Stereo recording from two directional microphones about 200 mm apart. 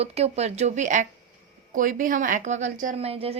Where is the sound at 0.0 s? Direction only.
30° right (ahead or behind).